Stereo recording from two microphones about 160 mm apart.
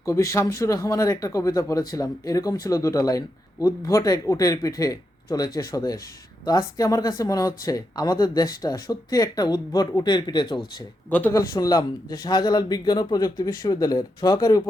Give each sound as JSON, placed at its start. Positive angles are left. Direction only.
{"t": 0.0, "sound": "speech", "side_deg": 20}
{"t": 11.1, "sound": "a man's voice", "side_deg": 15}
{"t": 11.5, "sound": "speech", "side_deg": 25}